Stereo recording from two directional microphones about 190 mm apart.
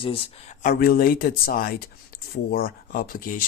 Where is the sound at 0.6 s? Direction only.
50° left (ahead or behind).